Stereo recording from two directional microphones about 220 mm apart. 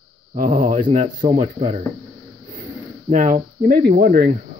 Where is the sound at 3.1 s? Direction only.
35° right (ahead or behind).